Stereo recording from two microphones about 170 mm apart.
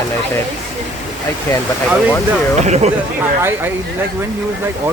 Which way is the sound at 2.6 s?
40° right (ahead or behind).